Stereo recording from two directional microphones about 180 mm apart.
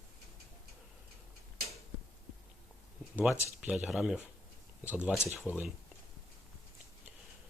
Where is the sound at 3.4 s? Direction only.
5° right (ahead or behind).